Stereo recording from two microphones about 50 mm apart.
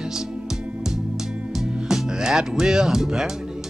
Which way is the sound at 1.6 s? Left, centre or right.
Centre.